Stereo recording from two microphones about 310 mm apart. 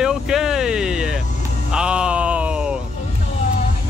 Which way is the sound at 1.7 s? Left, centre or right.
Centre.